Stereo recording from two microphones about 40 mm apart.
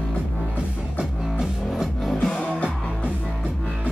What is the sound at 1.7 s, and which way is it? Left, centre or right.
Music, centre.